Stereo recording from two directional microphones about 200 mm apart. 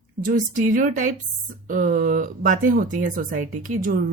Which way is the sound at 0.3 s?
40° right (ahead or behind).